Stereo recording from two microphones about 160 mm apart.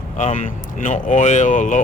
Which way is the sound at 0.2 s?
50° left (ahead or behind).